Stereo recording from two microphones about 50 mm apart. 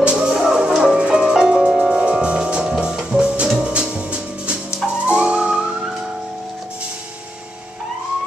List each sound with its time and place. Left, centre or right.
0.1 s music: centre
4.8 s theremin: centre